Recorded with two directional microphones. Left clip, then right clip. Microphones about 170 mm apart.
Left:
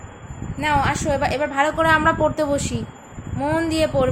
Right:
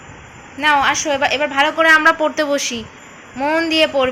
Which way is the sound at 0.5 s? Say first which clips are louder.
Right 6 dB; centre (ahead or behind).